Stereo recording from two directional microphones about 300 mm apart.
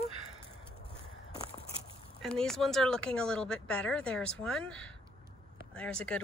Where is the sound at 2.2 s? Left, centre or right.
Centre.